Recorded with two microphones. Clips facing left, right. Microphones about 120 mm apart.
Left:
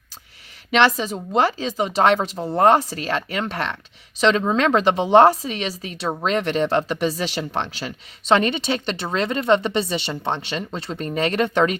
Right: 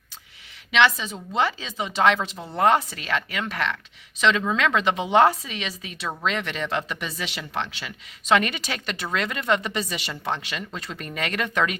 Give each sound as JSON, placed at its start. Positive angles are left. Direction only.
{"t": 0.7, "sound": "speech", "side_deg": 40}